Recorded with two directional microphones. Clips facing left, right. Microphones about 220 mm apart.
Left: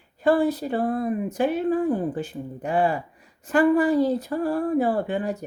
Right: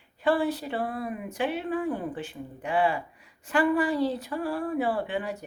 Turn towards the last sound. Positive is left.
turn(degrees=40)  # may be behind; listen again after turning